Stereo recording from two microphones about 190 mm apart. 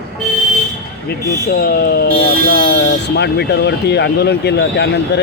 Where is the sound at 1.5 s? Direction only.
55° left (ahead or behind).